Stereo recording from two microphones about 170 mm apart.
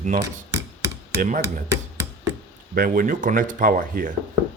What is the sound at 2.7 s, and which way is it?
Speech, 55° right (ahead or behind).